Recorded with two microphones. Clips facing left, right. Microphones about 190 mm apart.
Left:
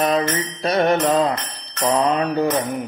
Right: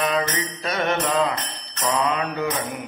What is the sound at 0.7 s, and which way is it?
Mantra, 35° left (ahead or behind).